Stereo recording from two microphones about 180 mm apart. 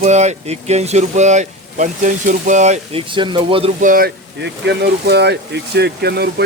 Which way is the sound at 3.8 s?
50° right (ahead or behind).